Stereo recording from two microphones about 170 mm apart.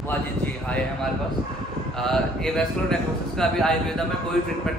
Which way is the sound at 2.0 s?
5° left (ahead or behind).